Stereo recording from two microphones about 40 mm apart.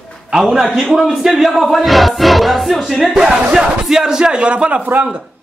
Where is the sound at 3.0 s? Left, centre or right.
Centre; by 4.8 s right.